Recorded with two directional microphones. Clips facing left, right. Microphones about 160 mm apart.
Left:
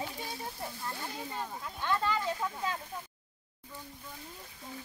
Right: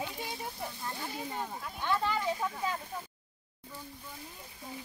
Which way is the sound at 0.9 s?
10° right (ahead or behind).